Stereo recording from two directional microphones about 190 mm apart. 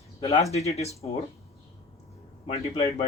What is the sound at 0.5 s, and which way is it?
Speech, 35° left (ahead or behind).